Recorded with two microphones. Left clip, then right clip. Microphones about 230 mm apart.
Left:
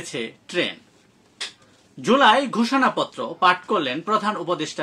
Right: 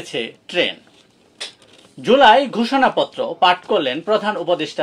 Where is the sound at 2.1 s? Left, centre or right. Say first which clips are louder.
Right 5 dB; centre.